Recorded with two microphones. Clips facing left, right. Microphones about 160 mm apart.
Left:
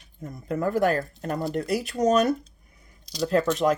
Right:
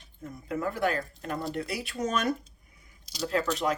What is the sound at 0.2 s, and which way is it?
Speech, 45° left (ahead or behind).